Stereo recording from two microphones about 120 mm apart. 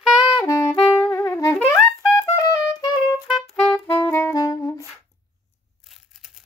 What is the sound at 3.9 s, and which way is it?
Saxophone, 20° left (ahead or behind).